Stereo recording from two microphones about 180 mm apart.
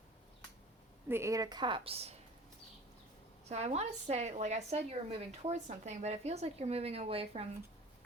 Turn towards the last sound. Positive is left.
turn(degrees=-35)  # may be behind; listen again after turning